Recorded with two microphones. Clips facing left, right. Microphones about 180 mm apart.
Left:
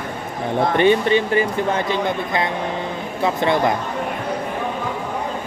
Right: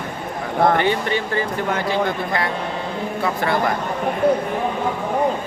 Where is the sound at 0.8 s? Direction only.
20° left (ahead or behind).